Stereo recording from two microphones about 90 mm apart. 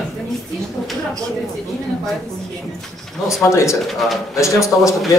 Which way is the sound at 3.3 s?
35° left (ahead or behind).